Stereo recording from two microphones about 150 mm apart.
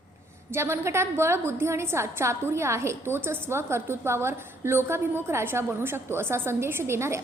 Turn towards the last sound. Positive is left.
turn(degrees=-15)  # may be behind; listen again after turning